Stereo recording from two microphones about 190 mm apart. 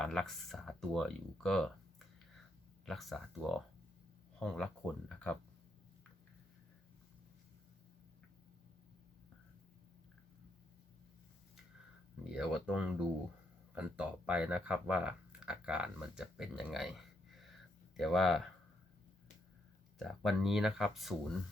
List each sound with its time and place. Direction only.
0.0 s speech: centre (ahead or behind)
2.8 s speech: centre (ahead or behind)
12.3 s speech: 5° right (ahead or behind)
20.0 s speech: centre (ahead or behind)